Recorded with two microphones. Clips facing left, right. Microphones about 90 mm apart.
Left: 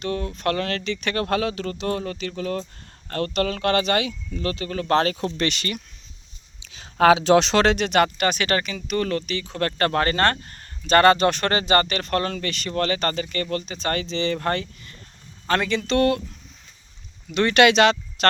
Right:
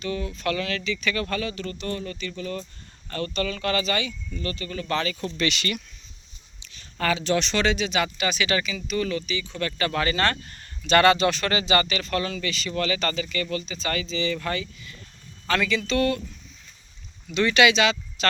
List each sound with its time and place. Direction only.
0.0 s speech: 55° left (ahead or behind); by 2.6 s 75° left (ahead or behind)
3.1 s speech: 60° left (ahead or behind)
4.4 s speech: 75° left (ahead or behind)
6.8 s speech: 85° left; by 16.2 s 60° left (ahead or behind)
17.3 s speech: 55° left (ahead or behind)